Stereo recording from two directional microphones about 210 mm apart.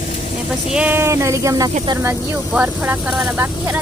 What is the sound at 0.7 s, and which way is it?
Speech, 5° right (ahead or behind).